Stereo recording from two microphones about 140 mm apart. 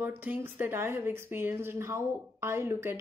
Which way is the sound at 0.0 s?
15° right (ahead or behind).